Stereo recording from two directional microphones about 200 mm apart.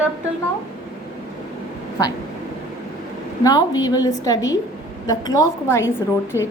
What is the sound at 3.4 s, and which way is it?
A woman's voice, 20° left (ahead or behind).